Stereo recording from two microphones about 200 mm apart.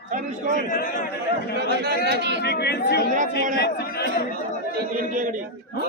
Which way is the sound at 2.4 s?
55° left (ahead or behind).